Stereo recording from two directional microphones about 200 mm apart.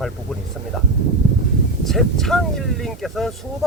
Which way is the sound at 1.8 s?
Centre (ahead or behind).